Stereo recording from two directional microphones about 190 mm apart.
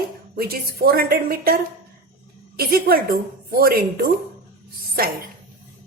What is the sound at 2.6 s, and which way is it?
A woman's voice, 55° right (ahead or behind).